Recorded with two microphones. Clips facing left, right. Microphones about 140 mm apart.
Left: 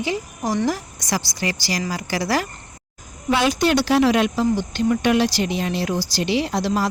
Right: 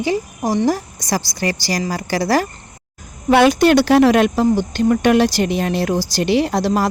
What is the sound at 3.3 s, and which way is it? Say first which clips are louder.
Speech: right 7 dB; 60° right (ahead or behind).